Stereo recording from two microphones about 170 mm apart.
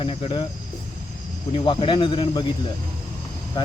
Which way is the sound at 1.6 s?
30° left (ahead or behind).